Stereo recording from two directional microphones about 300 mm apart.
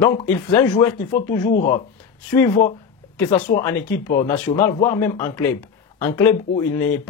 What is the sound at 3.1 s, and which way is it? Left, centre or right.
Speech, centre.